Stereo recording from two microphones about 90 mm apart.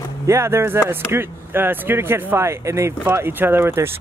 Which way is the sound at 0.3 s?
30° right (ahead or behind).